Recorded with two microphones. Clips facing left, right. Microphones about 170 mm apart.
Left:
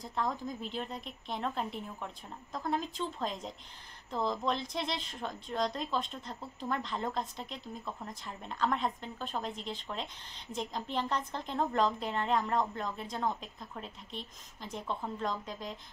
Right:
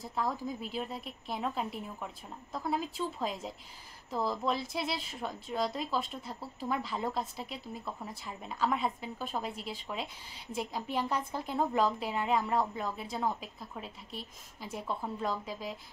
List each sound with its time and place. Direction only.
0.0 s a woman's voice: 5° right (ahead or behind)